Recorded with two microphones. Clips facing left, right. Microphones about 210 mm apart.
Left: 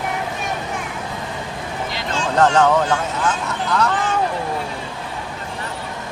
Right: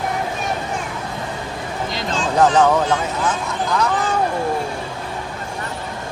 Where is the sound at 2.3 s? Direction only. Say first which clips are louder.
Even; 10° right (ahead or behind).